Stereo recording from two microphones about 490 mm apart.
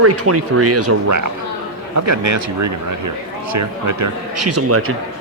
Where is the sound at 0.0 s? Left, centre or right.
Right.